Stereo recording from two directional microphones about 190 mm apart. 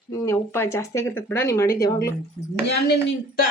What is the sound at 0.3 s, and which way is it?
A woman's voice, 15° left (ahead or behind).